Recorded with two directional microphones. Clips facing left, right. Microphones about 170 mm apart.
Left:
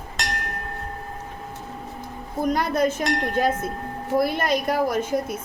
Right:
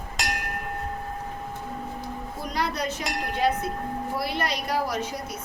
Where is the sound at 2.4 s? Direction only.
50° left (ahead or behind).